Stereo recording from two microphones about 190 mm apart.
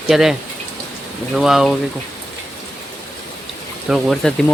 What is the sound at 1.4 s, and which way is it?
Speech, centre (ahead or behind).